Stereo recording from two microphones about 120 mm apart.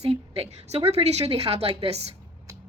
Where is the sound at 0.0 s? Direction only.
55° right (ahead or behind).